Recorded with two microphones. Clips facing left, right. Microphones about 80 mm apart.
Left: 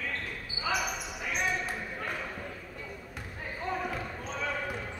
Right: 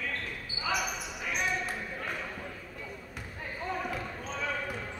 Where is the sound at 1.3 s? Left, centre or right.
Centre.